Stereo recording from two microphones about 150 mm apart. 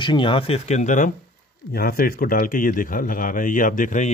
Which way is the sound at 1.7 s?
75° left (ahead or behind).